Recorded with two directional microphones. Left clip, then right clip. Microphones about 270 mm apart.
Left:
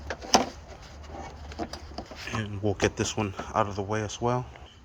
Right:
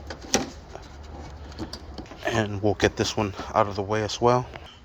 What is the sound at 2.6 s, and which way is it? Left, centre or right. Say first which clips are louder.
Speech: right 2 dB; centre.